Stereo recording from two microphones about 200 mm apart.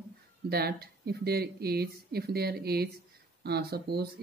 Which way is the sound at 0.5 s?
50° right (ahead or behind).